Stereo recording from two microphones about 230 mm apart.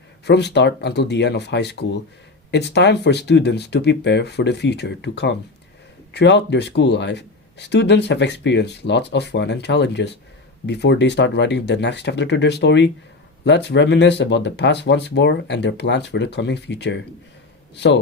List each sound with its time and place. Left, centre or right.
0.3 s speech: left